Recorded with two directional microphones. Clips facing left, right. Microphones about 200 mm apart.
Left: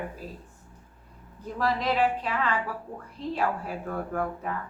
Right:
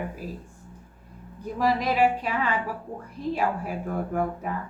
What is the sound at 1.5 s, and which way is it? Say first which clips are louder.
Speech: right 3 dB; 15° right (ahead or behind).